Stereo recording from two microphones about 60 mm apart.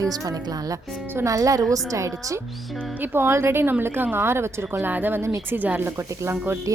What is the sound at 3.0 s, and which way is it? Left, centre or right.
A woman's voice, right.